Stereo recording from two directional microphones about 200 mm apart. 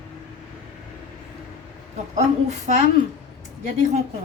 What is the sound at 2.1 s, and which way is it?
Speech, 35° right (ahead or behind).